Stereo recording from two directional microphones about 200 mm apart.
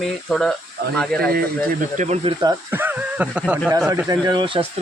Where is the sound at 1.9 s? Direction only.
35° right (ahead or behind).